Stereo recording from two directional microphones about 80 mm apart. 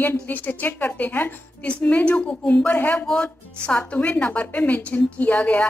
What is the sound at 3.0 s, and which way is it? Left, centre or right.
A woman's voice, centre.